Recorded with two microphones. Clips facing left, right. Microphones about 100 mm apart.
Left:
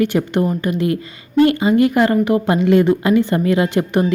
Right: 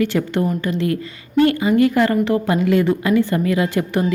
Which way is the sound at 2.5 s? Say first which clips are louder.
Left 5 dB; 25° left (ahead or behind).